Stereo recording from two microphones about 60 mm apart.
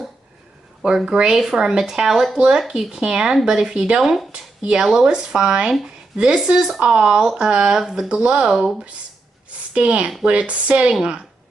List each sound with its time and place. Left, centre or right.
0.8 s speech: centre
9.8 s speech: centre